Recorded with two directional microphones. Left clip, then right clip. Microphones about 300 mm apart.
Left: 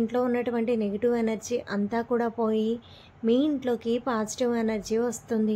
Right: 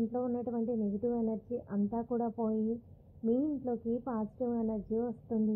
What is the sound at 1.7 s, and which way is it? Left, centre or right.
A woman's voice, left.